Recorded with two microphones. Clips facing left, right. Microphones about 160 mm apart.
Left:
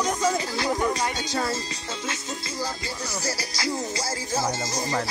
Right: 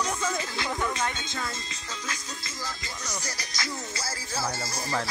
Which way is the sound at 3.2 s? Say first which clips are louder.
Left 7 dB; 35° left (ahead or behind).